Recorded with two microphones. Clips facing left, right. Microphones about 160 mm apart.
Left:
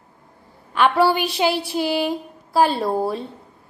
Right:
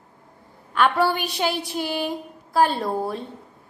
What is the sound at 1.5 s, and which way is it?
Child singing, 15° right (ahead or behind).